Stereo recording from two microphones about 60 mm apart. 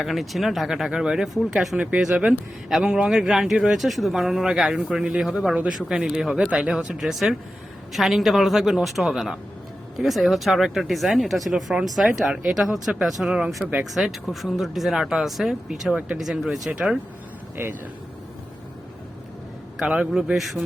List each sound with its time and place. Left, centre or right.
0.0 s speech: centre
2.1 s speech: right
2.8 s speech: centre
17.6 s speech: right
19.8 s speech: centre
20.3 s speech: centre